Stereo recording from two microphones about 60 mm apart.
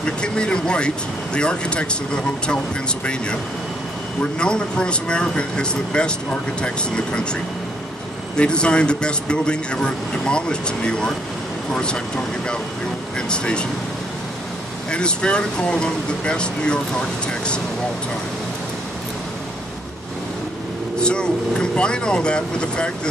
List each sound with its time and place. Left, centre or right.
0.0 s speech: centre
4.2 s speech: centre
8.4 s speech: centre
13.3 s speech: centre
14.9 s speech: centre
21.0 s speech: centre